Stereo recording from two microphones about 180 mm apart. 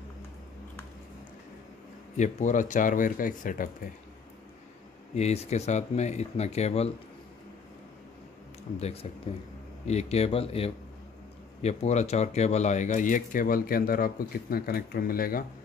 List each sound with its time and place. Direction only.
2.1 s speech: 40° left (ahead or behind)
5.1 s speech: 35° left (ahead or behind)
8.7 s speech: 35° left (ahead or behind); by 15.4 s 55° left (ahead or behind)